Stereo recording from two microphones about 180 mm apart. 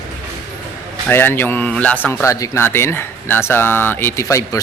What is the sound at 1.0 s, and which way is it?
A man's voice, 10° left (ahead or behind).